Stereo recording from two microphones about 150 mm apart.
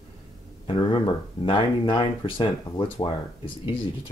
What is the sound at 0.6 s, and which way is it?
Speech, 35° left (ahead or behind).